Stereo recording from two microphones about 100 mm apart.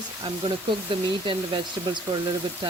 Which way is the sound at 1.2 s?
50° right (ahead or behind).